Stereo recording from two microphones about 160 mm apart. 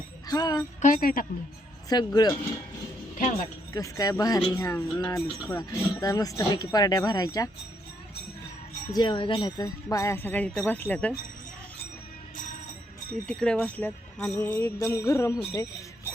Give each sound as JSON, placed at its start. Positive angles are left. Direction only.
{"t": 0.3, "sound": "speech", "side_deg": 25}
{"t": 0.8, "sound": "speech", "side_deg": 55}
{"t": 1.9, "sound": "speech", "side_deg": 25}
{"t": 3.8, "sound": "speech", "side_deg": 20}
{"t": 8.9, "sound": "speech", "side_deg": 30}
{"t": 13.2, "sound": "speech", "side_deg": 5}